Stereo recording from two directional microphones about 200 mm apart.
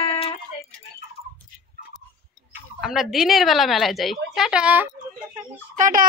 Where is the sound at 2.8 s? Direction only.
Centre (ahead or behind).